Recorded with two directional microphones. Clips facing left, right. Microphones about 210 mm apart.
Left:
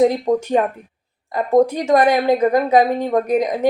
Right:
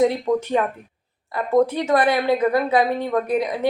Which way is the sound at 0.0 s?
40° left (ahead or behind).